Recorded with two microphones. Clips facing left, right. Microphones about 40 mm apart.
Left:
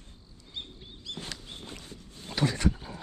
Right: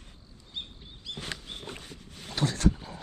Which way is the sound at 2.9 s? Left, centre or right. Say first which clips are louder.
Left 1 dB; centre.